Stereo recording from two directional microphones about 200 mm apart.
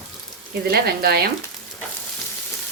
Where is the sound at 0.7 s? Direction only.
50° right (ahead or behind).